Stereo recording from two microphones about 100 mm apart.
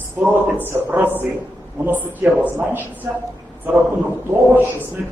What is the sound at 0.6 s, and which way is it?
A man's voice, 20° right (ahead or behind).